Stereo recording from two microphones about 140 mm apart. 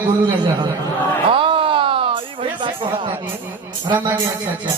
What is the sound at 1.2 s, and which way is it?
Groan, 40° right (ahead or behind).